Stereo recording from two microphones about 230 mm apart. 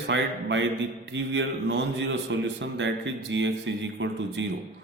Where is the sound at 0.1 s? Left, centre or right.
Right.